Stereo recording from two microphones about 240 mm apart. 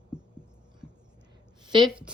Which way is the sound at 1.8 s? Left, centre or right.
Centre.